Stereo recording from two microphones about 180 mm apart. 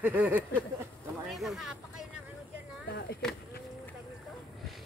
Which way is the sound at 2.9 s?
70° left (ahead or behind).